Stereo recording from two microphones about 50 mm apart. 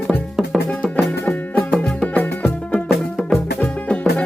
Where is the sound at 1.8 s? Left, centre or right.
Centre.